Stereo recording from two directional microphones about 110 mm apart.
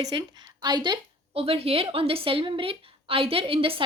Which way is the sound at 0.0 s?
35° right (ahead or behind).